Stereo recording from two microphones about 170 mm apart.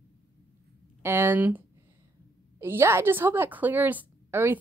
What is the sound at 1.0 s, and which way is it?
A woman's voice, 15° right (ahead or behind).